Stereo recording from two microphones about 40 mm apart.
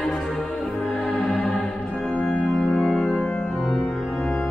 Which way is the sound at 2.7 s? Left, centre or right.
Centre.